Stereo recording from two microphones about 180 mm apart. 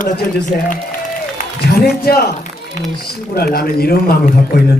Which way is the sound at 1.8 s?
60° left (ahead or behind).